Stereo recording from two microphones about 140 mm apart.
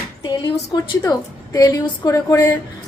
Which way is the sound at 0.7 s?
30° left (ahead or behind).